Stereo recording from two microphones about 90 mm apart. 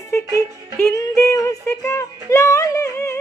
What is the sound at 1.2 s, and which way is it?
Music, 35° left (ahead or behind).